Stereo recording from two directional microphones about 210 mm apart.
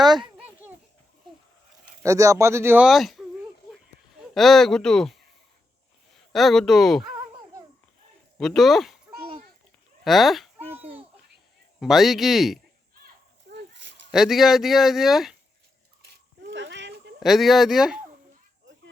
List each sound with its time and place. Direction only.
0.0 s a sound: 20° right (ahead or behind)
2.0 s speech: 15° right (ahead or behind)
4.4 s speech: centre (ahead or behind)
6.3 s speech: centre (ahead or behind)
7.1 s babbling: 15° right (ahead or behind)
8.4 s a child's voice: centre (ahead or behind)
10.0 s babbling: centre (ahead or behind)
11.8 s speech: centre (ahead or behind)
14.1 s speech: centre (ahead or behind)
16.0 s a sound: 55° right (ahead or behind)
17.2 s speech: centre (ahead or behind)